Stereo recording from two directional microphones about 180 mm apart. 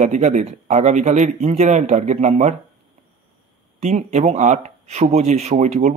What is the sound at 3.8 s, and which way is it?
Speech, 40° right (ahead or behind).